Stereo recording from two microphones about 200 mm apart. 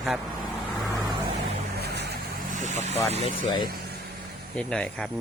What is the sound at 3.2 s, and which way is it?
Speech, 25° left (ahead or behind).